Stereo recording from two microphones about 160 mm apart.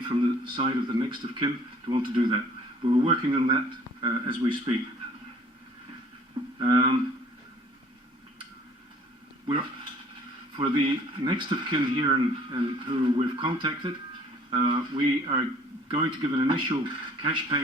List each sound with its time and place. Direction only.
0.1 s speech: 30° right (ahead or behind)
6.6 s speech: 30° right (ahead or behind)
9.5 s speech: 35° right (ahead or behind)